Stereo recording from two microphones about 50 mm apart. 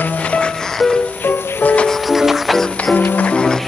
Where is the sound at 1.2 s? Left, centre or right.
Left.